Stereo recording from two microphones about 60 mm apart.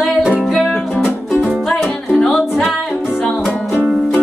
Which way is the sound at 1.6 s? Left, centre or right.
Centre.